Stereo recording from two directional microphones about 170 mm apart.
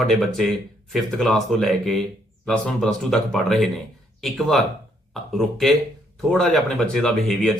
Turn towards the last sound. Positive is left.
turn(degrees=0)  # may be behind; listen again after turning